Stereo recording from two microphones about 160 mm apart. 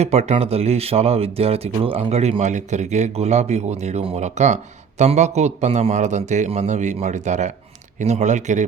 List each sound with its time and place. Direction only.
0.0 s speech: 40° right (ahead or behind)